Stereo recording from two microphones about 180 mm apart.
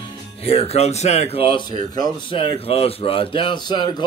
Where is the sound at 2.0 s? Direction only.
30° left (ahead or behind).